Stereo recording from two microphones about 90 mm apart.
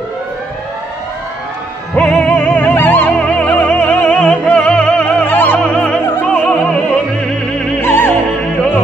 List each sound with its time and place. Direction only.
2.0 s music: 15° left (ahead or behind)
5.6 s music: 10° left (ahead or behind)
7.8 s opera: 25° left (ahead or behind)